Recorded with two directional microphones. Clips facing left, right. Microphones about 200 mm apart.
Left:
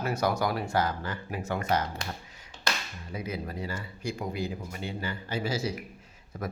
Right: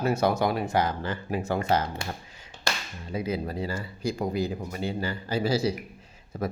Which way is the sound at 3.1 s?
30° right (ahead or behind).